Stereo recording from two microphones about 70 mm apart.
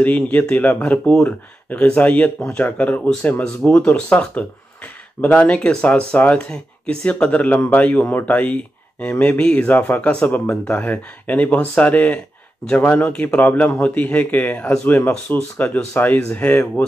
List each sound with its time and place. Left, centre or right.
0.0 s speech: left
3.4 s speech: centre
15.6 s speech: left